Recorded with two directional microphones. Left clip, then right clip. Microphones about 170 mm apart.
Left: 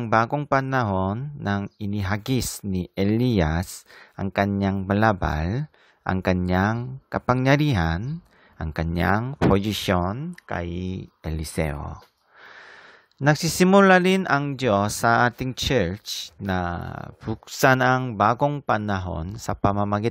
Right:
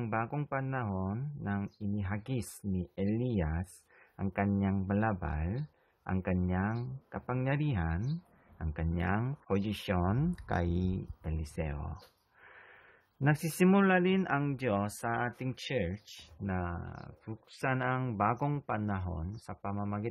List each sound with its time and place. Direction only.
0.1 s speech: 30° left (ahead or behind)
4.2 s speech: 25° left (ahead or behind)
10.3 s speech: 15° left (ahead or behind)
11.2 s speech: 35° left (ahead or behind)
13.2 s speech: 30° left (ahead or behind)